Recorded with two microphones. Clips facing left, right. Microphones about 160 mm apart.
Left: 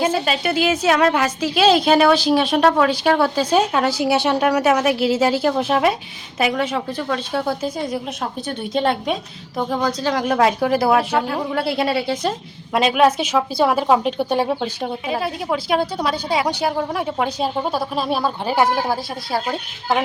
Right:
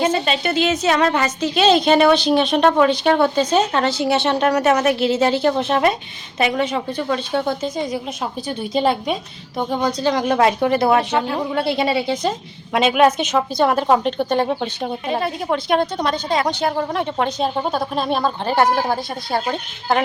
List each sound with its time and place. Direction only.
0.0 s a woman's voice: 5° left (ahead or behind)